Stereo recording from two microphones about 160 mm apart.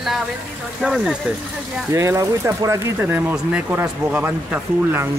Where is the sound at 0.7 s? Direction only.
5° right (ahead or behind).